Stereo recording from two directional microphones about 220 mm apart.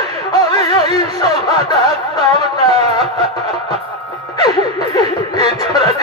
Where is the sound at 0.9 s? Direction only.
15° left (ahead or behind).